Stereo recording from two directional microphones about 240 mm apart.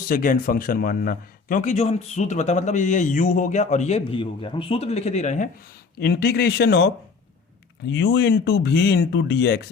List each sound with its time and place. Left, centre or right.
0.1 s a man's voice: left
6.0 s speech: left